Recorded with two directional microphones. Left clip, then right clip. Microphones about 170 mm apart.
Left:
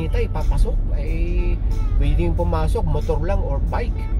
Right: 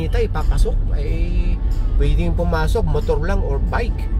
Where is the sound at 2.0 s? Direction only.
40° right (ahead or behind).